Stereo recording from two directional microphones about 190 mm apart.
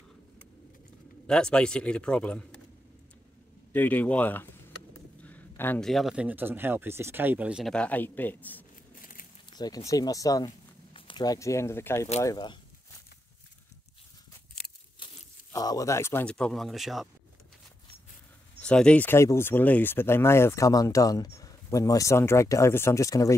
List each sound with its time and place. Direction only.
1.2 s speech: 5° left (ahead or behind)
3.7 s speech: 10° left (ahead or behind)
9.0 s a sound: 45° left (ahead or behind)
9.5 s a sound: 20° left (ahead or behind)
9.8 s speech: 20° left (ahead or behind)
10.9 s speech: 30° left (ahead or behind)
15.5 s speech: 20° left (ahead or behind); by 17.1 s centre (ahead or behind)
18.6 s speech: 5° left (ahead or behind)